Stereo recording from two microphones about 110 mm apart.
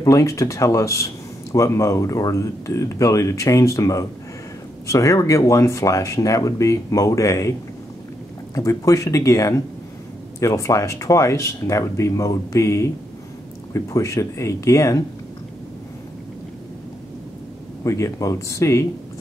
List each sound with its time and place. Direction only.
0.0 s a man's voice: 30° left (ahead or behind)
8.5 s a man's voice: 30° left (ahead or behind)
17.8 s a man's voice: 25° left (ahead or behind)